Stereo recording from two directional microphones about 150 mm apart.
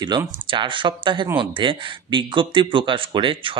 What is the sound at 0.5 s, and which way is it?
Speech, 35° right (ahead or behind).